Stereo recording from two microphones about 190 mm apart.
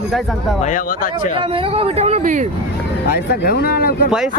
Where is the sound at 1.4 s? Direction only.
30° right (ahead or behind).